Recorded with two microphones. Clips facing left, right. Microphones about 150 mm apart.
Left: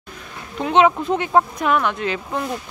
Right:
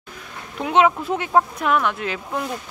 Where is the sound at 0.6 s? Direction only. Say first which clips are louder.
Left 2 dB; 5° right (ahead or behind).